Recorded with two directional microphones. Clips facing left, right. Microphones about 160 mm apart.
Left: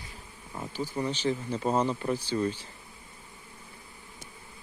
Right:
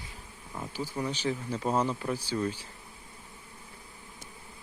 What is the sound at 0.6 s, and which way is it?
Speech, 10° left (ahead or behind).